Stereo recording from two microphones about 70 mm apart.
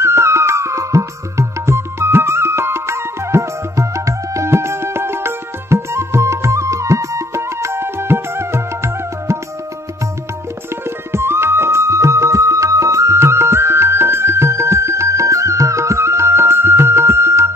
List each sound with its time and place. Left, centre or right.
0.0 s music: right
11.1 s music: right